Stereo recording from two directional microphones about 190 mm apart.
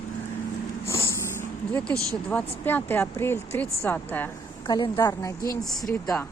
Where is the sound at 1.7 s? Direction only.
5° left (ahead or behind).